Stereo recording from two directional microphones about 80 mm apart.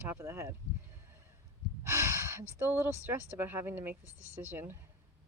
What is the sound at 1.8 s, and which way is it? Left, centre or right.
Gasp, right.